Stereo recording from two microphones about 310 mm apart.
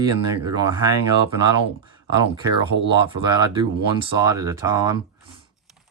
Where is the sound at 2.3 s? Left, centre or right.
Centre.